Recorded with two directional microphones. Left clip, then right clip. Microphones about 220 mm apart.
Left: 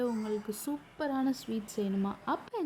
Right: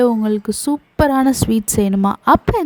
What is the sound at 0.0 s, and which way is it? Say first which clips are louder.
A woman's voice: right 18 dB; 45° right (ahead or behind).